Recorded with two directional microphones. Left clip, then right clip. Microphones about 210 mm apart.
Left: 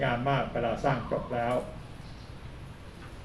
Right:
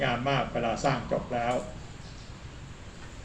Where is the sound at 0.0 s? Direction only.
50° right (ahead or behind).